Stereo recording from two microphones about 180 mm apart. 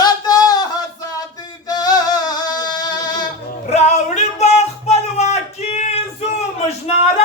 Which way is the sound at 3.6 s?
40° left (ahead or behind).